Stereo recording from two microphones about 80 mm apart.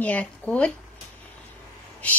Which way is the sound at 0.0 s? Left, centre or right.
Centre.